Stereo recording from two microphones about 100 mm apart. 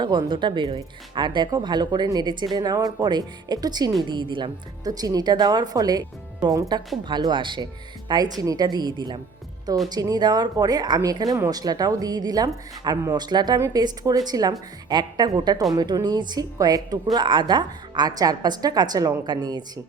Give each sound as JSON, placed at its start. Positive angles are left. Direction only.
{"t": 0.0, "sound": "a woman's voice", "side_deg": -50}
{"t": 4.8, "sound": "a woman's voice", "side_deg": -40}
{"t": 17.2, "sound": "a woman's voice", "side_deg": -50}